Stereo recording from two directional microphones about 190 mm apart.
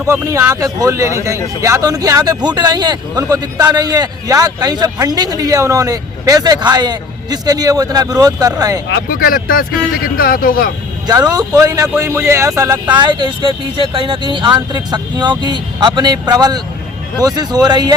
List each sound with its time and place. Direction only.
0.1 s a man's voice: 15° right (ahead or behind)
8.9 s speech: 55° left (ahead or behind)
11.0 s a man's voice: 20° right (ahead or behind)